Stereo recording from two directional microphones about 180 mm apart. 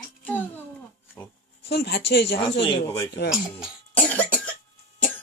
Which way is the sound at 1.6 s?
65° left (ahead or behind).